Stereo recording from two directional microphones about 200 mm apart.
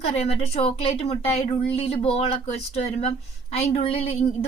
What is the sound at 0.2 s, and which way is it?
Speech, 30° left (ahead or behind).